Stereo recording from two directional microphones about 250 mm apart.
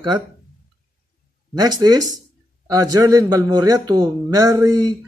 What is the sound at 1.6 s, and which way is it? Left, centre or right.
A man's voice, centre.